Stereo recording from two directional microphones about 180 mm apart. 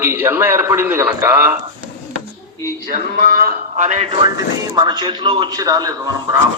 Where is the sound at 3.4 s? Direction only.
45° right (ahead or behind).